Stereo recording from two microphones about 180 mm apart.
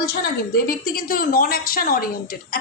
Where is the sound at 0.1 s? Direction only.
55° left (ahead or behind).